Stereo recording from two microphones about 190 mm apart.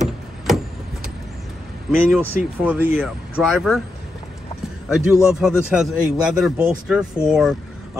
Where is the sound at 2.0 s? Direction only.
5° right (ahead or behind).